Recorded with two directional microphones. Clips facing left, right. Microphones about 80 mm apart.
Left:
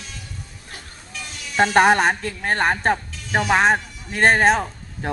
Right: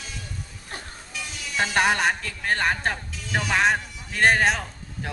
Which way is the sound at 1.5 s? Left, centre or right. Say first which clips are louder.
Left 7 dB; left.